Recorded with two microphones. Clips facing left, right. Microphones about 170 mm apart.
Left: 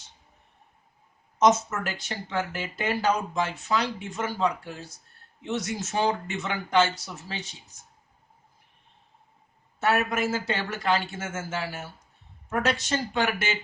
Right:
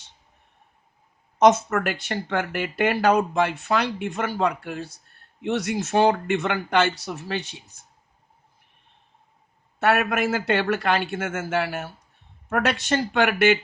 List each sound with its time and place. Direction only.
1.4 s speech: 60° right (ahead or behind)
9.8 s speech: 65° right (ahead or behind)